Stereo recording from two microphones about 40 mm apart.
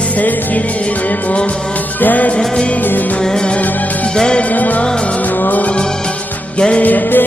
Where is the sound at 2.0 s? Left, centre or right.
Left.